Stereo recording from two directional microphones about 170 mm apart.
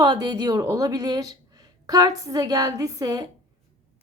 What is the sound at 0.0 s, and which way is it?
Speech, 25° right (ahead or behind).